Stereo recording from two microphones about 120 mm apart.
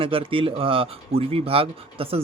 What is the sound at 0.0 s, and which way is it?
Speech, 50° right (ahead or behind).